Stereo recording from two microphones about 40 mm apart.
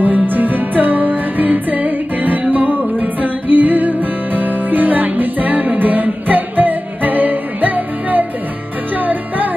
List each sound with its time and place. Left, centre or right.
0.0 s music: right